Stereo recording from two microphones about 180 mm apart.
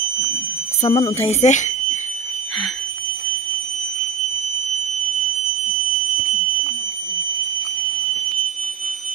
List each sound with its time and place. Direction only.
0.8 s a woman's voice: 35° left (ahead or behind)